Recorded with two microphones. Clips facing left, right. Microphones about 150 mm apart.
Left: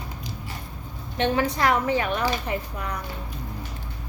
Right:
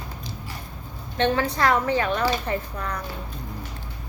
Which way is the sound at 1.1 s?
15° left (ahead or behind).